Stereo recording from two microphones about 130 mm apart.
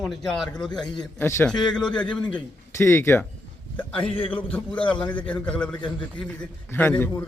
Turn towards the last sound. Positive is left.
turn(degrees=15)  # may be behind; listen again after turning